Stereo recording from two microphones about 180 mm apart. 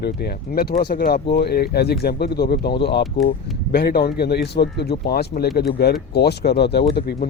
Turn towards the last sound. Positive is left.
turn(degrees=60)  # may be behind; listen again after turning